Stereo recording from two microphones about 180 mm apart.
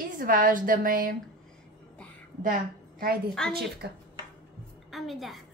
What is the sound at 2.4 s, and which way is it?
Speech, 50° right (ahead or behind).